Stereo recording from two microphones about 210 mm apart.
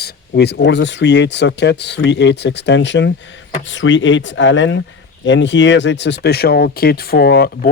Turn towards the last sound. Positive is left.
turn(degrees=50)  # may be behind; listen again after turning